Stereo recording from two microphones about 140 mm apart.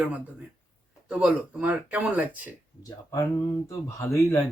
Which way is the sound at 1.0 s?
10° right (ahead or behind).